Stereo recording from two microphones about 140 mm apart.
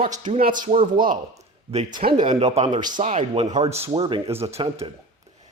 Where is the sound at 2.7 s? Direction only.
30° right (ahead or behind).